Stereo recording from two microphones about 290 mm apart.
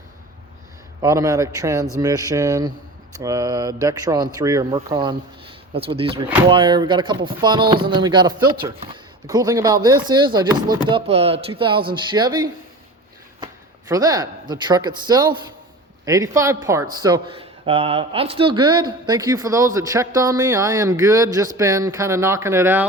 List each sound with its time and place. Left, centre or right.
1.0 s speech: centre
13.4 s speech: centre